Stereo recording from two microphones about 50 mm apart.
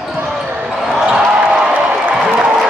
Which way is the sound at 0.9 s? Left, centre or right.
Centre.